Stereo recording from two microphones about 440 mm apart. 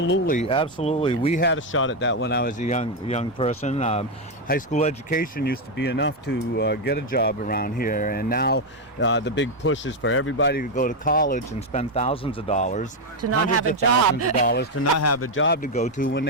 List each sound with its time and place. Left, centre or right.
0.0 s speech: left
13.2 s speech: right
14.4 s speech: left
14.9 s speech: left; by 16.2 s centre